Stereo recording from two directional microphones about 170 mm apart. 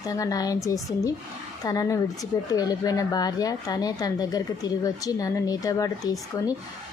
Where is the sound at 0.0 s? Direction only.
20° left (ahead or behind).